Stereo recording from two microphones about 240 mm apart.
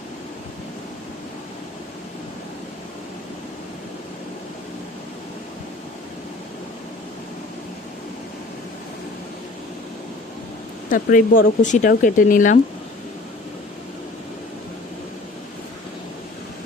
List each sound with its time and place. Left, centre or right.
10.8 s speech: left